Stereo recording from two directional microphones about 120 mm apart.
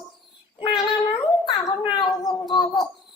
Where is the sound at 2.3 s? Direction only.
35° left (ahead or behind).